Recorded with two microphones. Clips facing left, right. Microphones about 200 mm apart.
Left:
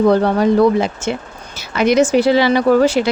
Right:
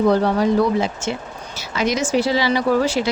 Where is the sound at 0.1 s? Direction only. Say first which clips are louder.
Left 3 dB; 55° left (ahead or behind).